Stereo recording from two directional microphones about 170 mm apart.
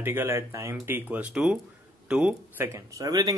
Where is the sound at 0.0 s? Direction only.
10° right (ahead or behind).